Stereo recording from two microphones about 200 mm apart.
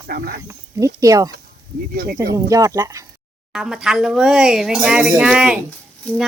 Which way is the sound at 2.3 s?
15° right (ahead or behind).